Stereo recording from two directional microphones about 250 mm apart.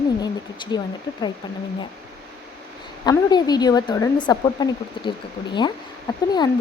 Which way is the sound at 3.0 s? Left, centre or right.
Centre.